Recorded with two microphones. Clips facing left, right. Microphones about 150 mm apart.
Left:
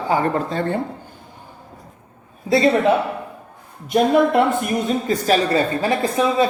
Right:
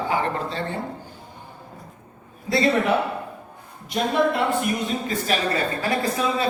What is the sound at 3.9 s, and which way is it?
Speech, 50° left (ahead or behind).